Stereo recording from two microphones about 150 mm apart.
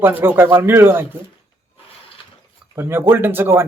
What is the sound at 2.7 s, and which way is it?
Speech, 15° right (ahead or behind).